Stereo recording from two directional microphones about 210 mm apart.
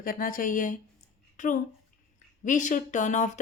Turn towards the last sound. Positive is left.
turn(degrees=35)  # may be behind; listen again after turning